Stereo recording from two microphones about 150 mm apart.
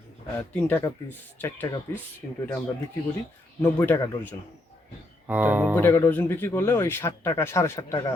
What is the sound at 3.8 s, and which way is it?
Speech, 15° left (ahead or behind).